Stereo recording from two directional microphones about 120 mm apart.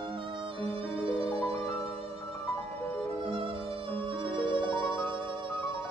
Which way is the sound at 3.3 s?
50° right (ahead or behind).